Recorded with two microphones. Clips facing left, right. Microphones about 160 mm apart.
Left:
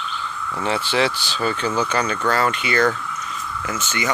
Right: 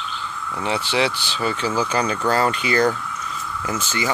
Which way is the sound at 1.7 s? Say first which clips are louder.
Right 2 dB; 10° right (ahead or behind).